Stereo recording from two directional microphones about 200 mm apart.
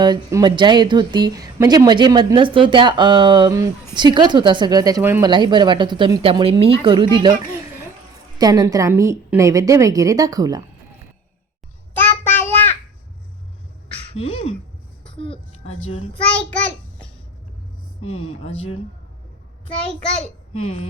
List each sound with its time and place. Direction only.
0.0 s a woman's voice: 20° right (ahead or behind)
8.4 s a woman's voice: 20° right (ahead or behind)
11.9 s child singing: 10° left (ahead or behind)
14.1 s a woman's voice: 30° left (ahead or behind)
18.0 s speech: 30° left (ahead or behind)
20.6 s speech: 30° left (ahead or behind)